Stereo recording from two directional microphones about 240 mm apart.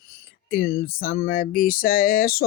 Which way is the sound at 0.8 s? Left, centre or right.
Left.